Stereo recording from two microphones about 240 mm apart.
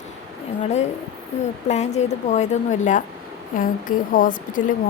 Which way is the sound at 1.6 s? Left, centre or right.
Left.